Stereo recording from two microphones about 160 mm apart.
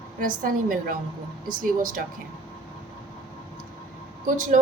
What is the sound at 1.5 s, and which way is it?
Speech, 60° right (ahead or behind).